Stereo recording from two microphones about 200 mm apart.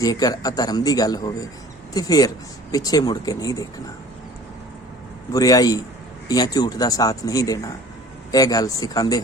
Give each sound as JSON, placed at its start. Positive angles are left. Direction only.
{"t": 0.0, "sound": "speech", "side_deg": 20}
{"t": 5.3, "sound": "speech", "side_deg": 20}